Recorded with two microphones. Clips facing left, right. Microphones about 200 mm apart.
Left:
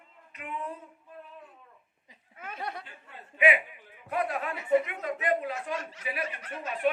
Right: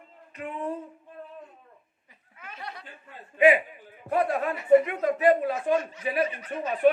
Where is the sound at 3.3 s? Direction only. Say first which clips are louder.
Right 6 dB; 35° right (ahead or behind).